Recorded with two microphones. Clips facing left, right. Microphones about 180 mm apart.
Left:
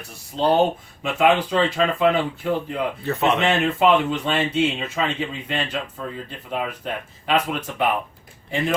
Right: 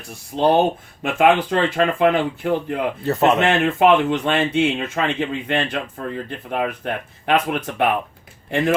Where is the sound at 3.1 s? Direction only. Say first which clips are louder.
Right 5 dB; 40° right (ahead or behind).